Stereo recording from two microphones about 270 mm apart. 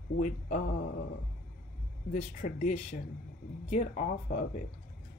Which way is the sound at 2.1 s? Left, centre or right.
Left.